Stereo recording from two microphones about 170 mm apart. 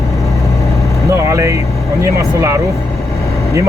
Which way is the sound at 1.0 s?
15° right (ahead or behind).